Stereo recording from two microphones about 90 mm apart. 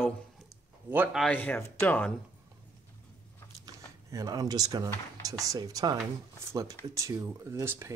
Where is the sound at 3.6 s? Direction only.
45° right (ahead or behind).